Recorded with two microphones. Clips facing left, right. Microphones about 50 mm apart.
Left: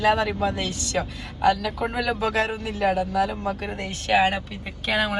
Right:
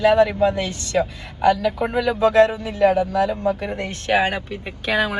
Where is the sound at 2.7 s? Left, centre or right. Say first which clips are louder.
Right 5 dB; centre.